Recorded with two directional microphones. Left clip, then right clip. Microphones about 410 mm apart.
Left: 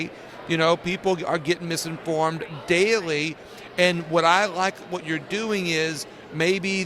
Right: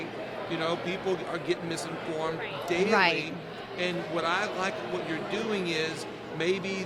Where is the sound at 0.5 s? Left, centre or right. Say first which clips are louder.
Left 10 dB; left.